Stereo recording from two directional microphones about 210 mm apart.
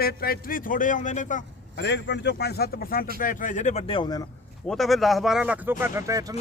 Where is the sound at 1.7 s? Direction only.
55° left (ahead or behind); by 4.2 s 20° left (ahead or behind).